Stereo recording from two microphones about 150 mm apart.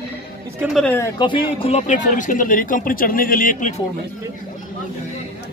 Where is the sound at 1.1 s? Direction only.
35° left (ahead or behind); by 3.7 s 60° left (ahead or behind).